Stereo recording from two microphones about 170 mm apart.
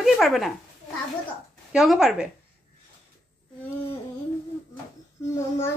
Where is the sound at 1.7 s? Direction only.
Centre (ahead or behind).